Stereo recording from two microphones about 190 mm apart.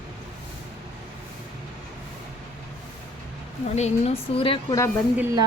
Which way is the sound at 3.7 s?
35° left (ahead or behind).